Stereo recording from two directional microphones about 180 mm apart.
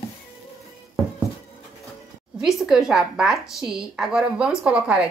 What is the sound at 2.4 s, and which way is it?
Speech, 5° right (ahead or behind).